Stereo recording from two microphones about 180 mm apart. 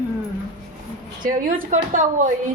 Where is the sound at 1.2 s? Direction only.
50° right (ahead or behind).